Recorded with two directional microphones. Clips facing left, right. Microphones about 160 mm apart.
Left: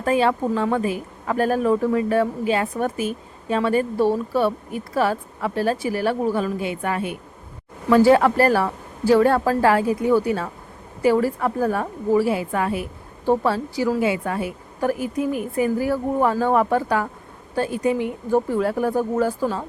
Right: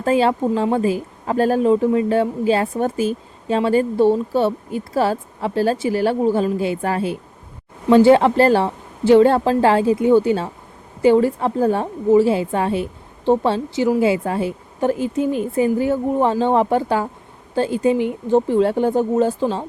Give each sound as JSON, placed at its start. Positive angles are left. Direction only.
{"t": 0.0, "sound": "speech", "side_deg": -30}